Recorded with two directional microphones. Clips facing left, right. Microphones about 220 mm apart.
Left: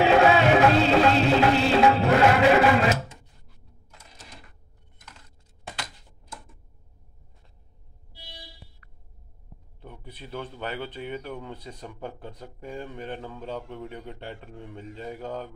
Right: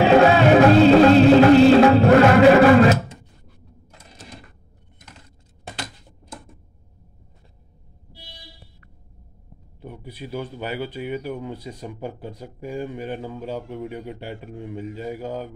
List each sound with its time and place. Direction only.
0.0 s music: 35° right (ahead or behind)
9.8 s speech: 10° right (ahead or behind)